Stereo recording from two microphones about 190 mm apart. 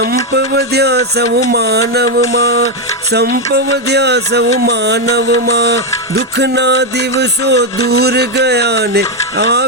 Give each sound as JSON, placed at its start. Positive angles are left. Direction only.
{"t": 0.0, "sound": "music", "side_deg": -55}
{"t": 3.5, "sound": "music", "side_deg": -60}